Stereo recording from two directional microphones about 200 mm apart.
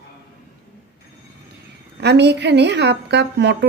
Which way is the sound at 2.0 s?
55° right (ahead or behind).